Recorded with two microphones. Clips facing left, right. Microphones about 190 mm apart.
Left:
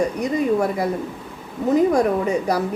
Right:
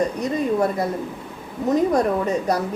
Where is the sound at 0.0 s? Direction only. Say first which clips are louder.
Left 1 dB; 10° left (ahead or behind).